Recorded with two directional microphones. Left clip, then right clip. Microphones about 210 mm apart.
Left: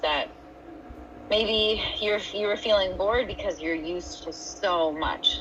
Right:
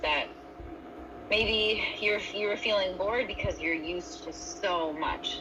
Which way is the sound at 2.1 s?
30° left (ahead or behind).